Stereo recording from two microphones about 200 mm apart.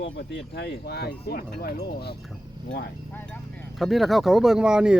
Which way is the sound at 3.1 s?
5° left (ahead or behind).